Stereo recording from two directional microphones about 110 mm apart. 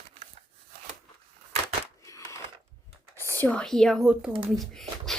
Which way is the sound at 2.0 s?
30° left (ahead or behind).